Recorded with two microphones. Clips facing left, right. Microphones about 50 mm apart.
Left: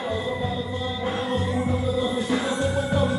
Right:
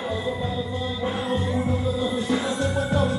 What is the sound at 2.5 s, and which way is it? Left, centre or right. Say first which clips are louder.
Music: even; centre.